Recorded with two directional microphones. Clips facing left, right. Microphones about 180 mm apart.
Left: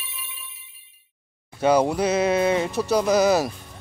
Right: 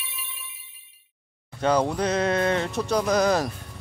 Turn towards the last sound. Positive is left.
turn(degrees=5)  # may be behind; listen again after turning